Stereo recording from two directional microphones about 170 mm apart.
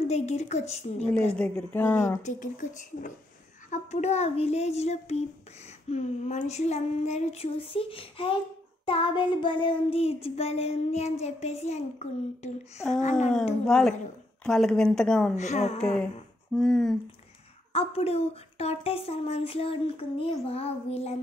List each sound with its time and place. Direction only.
0.1 s child singing: 40° left (ahead or behind)
1.1 s speech: 10° left (ahead or behind)
2.2 s speech: 50° left (ahead or behind)
3.7 s child singing: 40° left (ahead or behind)
13.7 s speech: 5° left (ahead or behind)
15.3 s child singing: 40° left (ahead or behind)
16.5 s speech: 5° left (ahead or behind)
17.7 s child singing: 35° left (ahead or behind)